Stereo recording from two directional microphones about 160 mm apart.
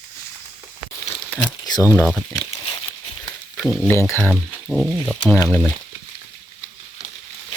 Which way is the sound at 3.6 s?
Centre (ahead or behind).